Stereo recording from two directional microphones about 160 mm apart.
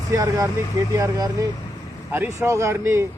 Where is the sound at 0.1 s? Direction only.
20° right (ahead or behind).